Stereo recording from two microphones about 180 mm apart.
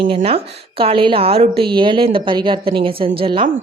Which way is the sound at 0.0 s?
30° right (ahead or behind).